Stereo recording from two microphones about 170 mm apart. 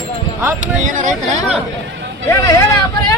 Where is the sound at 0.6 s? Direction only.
45° right (ahead or behind).